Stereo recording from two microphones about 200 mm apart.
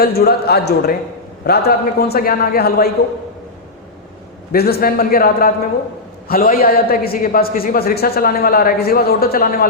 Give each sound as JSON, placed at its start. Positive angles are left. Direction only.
{"t": 0.0, "sound": "a man's voice", "side_deg": 50}
{"t": 4.5, "sound": "a man's voice", "side_deg": 50}